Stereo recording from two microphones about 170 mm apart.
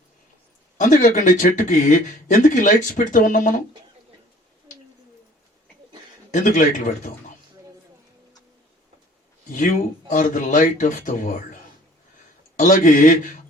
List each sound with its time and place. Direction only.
0.8 s speech: 50° left (ahead or behind)
6.3 s speech: 50° left (ahead or behind)
9.6 s speech: 50° left (ahead or behind)
12.5 s speech: 50° left (ahead or behind)